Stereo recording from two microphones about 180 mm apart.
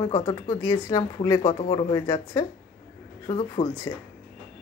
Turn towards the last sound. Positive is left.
turn(degrees=20)  # may be behind; listen again after turning